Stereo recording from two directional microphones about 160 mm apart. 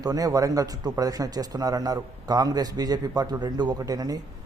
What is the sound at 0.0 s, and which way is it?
A man's voice, 20° right (ahead or behind).